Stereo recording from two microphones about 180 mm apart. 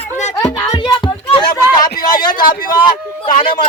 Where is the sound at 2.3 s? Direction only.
50° left (ahead or behind).